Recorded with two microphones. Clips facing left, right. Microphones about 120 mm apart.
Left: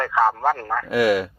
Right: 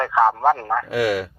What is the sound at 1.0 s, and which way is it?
Speech, 20° left (ahead or behind).